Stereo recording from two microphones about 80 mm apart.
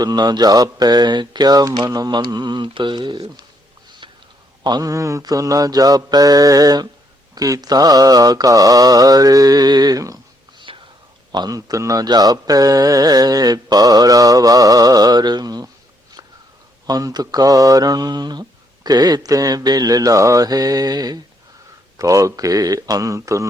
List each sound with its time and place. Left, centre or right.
0.0 s speech: right
4.6 s speech: right
10.7 s whispering: right
11.3 s speech: right
16.8 s speech: right
21.9 s speech: right